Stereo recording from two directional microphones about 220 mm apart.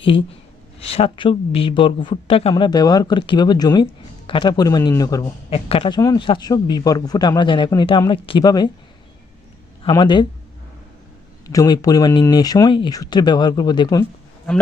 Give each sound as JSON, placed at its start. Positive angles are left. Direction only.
{"t": 0.0, "sound": "speech", "side_deg": 25}
{"t": 5.5, "sound": "speech", "side_deg": 25}
{"t": 9.8, "sound": "speech", "side_deg": 20}
{"t": 11.4, "sound": "speech", "side_deg": 15}